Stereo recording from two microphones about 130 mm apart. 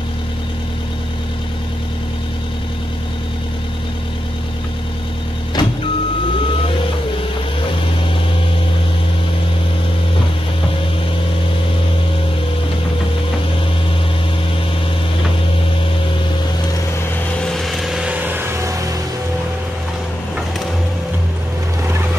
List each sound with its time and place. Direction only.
5.6 s vehicle: 35° left (ahead or behind)
17.4 s vehicle: 5° left (ahead or behind); by 18.8 s 20° right (ahead or behind)